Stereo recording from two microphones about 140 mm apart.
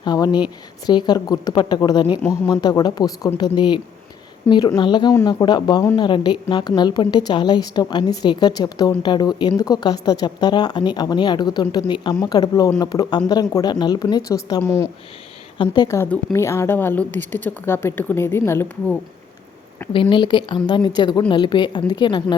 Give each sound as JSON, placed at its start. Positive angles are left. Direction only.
{"t": 0.0, "sound": "a woman's voice", "side_deg": 30}
{"t": 16.0, "sound": "a woman's voice", "side_deg": 15}
{"t": 19.9, "sound": "a woman's voice", "side_deg": 35}